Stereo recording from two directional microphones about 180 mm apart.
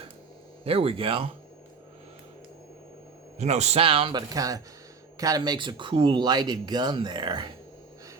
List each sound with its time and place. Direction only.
0.6 s a man's voice: 35° right (ahead or behind)
3.3 s a man's voice: 40° right (ahead or behind)